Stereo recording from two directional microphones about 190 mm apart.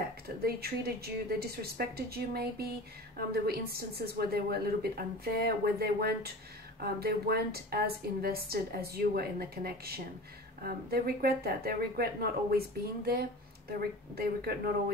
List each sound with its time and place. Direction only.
0.4 s a woman's voice: 55° right (ahead or behind)